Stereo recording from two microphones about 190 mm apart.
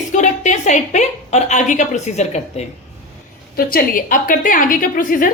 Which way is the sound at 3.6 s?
50° left (ahead or behind).